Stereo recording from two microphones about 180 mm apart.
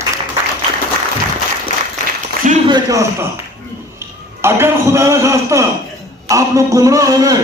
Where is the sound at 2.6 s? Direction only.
20° right (ahead or behind).